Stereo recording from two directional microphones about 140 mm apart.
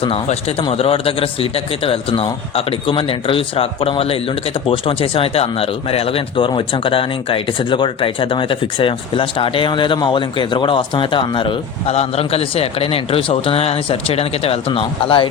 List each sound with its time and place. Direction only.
0.0 s a man's voice: 45° left (ahead or behind)